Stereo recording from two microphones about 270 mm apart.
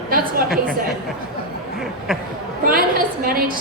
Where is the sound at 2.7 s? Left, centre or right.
Right.